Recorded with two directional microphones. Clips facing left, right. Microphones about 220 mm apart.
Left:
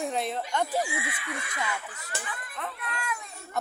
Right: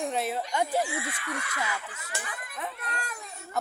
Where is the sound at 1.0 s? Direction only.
10° left (ahead or behind).